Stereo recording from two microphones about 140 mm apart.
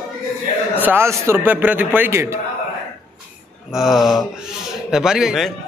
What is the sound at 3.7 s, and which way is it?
Speech, centre (ahead or behind).